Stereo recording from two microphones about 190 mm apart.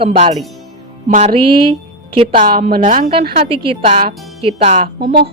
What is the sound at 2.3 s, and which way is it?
A woman's voice, 45° right (ahead or behind).